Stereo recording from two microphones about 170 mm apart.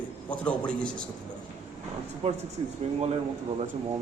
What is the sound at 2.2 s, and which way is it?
Speech, 35° right (ahead or behind).